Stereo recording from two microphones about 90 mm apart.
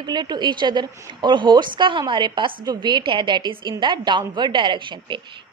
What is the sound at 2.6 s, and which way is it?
A woman's voice, 55° right (ahead or behind).